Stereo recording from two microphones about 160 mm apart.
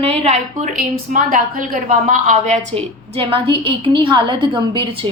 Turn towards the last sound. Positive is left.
turn(degrees=-30)  # may be behind; listen again after turning